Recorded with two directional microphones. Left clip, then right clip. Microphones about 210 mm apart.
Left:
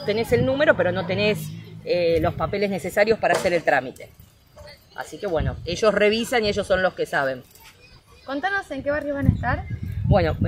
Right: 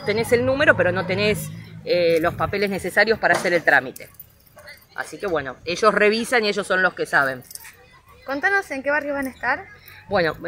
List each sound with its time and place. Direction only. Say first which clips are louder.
0.0 s speech: right 2 dB; 5° left (ahead or behind)
4.9 s speech: right 1 dB; 5° left (ahead or behind)
8.3 s a woman's voice: right 4 dB; 30° right (ahead or behind)
10.0 s speech: even; 5° left (ahead or behind)